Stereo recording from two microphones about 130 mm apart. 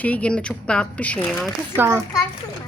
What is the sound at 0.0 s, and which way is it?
Speech, 10° left (ahead or behind).